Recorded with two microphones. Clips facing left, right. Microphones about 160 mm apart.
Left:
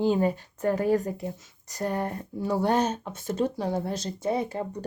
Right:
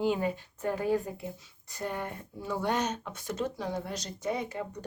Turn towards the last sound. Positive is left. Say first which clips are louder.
# left 5 dB
turn(degrees=35)  # may be behind; listen again after turning